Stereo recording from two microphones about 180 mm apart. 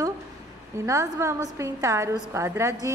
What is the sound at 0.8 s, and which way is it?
A woman's voice, 15° right (ahead or behind).